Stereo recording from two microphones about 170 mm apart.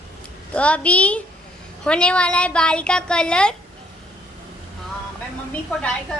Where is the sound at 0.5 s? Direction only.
10° left (ahead or behind).